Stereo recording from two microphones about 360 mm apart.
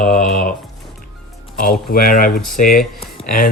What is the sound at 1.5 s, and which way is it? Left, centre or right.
Speech, left.